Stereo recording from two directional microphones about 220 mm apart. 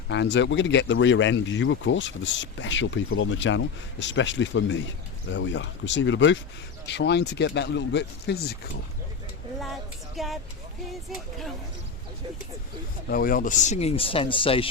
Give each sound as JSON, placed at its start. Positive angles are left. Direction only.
{"t": 0.1, "sound": "speech", "side_deg": 55}
{"t": 10.2, "sound": "speech", "side_deg": 0}
{"t": 13.1, "sound": "speech", "side_deg": 40}